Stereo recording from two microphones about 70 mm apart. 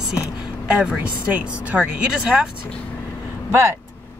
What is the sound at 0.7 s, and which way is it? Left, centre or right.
Speech, centre.